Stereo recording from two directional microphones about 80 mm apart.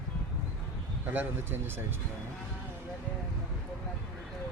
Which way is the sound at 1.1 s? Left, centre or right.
Right.